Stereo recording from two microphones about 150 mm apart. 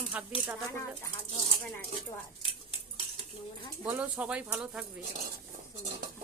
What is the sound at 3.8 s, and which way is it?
Speech, 10° right (ahead or behind).